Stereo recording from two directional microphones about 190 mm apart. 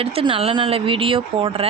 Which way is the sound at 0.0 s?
30° right (ahead or behind).